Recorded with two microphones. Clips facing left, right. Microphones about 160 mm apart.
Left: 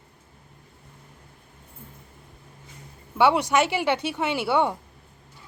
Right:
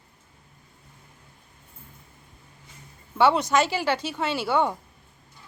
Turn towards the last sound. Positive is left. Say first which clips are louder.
# left 1 dB
turn(degrees=15)  # may be behind; listen again after turning